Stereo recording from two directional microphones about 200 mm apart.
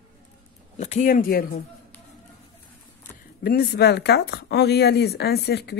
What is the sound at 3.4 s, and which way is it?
Speech, 55° left (ahead or behind).